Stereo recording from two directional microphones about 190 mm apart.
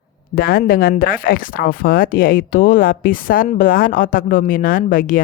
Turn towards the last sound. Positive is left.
turn(degrees=45)  # may be behind; listen again after turning